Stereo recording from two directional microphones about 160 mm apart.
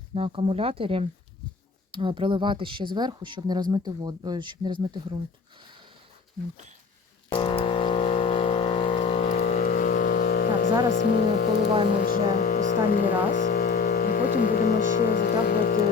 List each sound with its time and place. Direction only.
0.1 s a woman's voice: 35° right (ahead or behind)
7.3 s vehicle: 30° left (ahead or behind); by 10.7 s 65° left (ahead or behind)
10.9 s speech: 65° left (ahead or behind)